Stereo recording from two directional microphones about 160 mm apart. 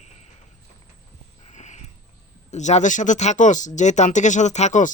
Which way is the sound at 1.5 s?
45° left (ahead or behind).